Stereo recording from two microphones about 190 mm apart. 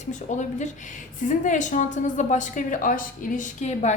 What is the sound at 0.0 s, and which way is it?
A woman's voice, 40° left (ahead or behind).